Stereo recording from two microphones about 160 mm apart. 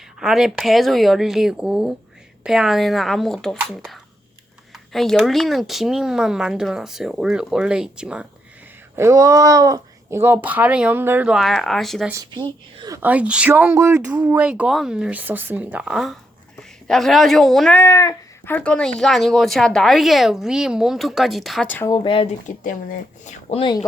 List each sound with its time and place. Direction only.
0.2 s speech: 5° right (ahead or behind)
9.0 s speech: 20° right (ahead or behind)
11.3 s speech: centre (ahead or behind)
12.1 s speech: 25° right (ahead or behind)
13.0 s a woman's voice: 10° right (ahead or behind)
17.7 s speech: 20° left (ahead or behind); by 21.7 s centre (ahead or behind)
21.8 s speech: 30° left (ahead or behind)
22.4 s speech: 50° left (ahead or behind)
23.5 s speech: 30° left (ahead or behind)